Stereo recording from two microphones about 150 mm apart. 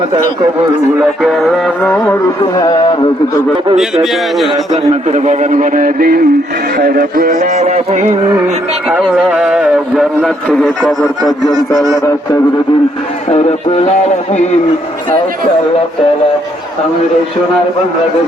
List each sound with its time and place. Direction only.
1.2 s music: centre (ahead or behind)
2.4 s a sound: 25° left (ahead or behind)
5.1 s a man's voice: 50° right (ahead or behind); by 6.2 s 75° right (ahead or behind)
6.7 s a sound: 85° right; by 8.1 s 50° right (ahead or behind)
8.9 s a man's voice: centre (ahead or behind)
13.3 s music: 45° left (ahead or behind)